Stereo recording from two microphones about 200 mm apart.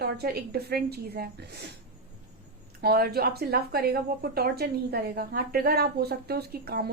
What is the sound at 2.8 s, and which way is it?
A woman's voice, 50° right (ahead or behind).